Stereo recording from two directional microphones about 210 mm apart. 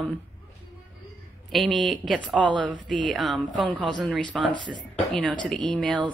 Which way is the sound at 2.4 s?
20° right (ahead or behind).